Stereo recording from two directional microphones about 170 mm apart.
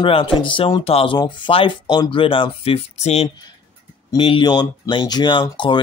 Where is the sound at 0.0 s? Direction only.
30° left (ahead or behind).